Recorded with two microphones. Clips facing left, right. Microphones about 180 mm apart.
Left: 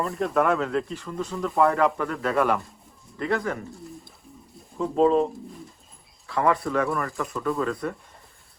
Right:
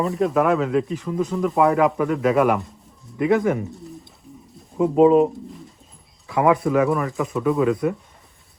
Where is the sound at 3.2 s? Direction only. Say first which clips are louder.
Right 8 dB; 15° right (ahead or behind).